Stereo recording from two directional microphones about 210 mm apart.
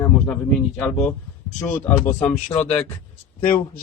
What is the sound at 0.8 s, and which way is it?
Speech, 10° left (ahead or behind).